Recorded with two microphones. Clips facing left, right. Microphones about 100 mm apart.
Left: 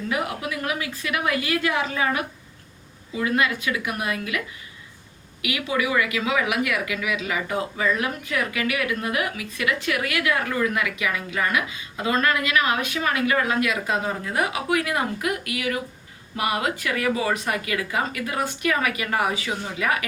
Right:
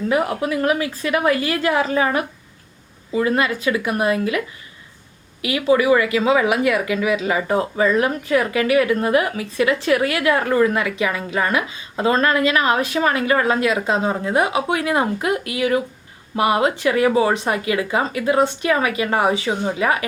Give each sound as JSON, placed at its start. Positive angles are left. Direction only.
{"t": 0.1, "sound": "speech", "side_deg": -35}